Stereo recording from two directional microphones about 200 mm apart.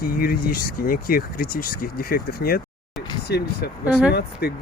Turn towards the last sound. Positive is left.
turn(degrees=50)  # may be behind; listen again after turning